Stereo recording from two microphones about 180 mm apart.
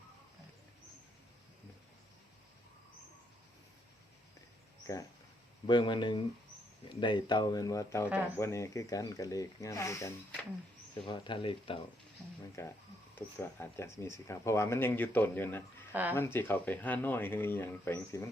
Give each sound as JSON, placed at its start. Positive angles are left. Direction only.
{"t": 4.9, "sound": "speech", "side_deg": 20}
{"t": 11.0, "sound": "speech", "side_deg": 25}
{"t": 12.6, "sound": "speech", "side_deg": 15}
{"t": 15.9, "sound": "speech", "side_deg": -10}
{"t": 16.1, "sound": "speech", "side_deg": 15}